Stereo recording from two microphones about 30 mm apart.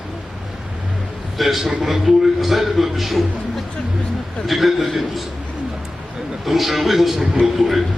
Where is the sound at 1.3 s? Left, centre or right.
Centre.